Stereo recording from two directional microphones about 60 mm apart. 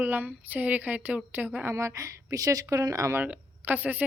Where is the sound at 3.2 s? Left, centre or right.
Right.